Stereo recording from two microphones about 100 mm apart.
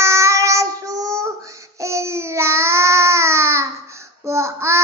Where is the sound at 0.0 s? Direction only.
30° right (ahead or behind).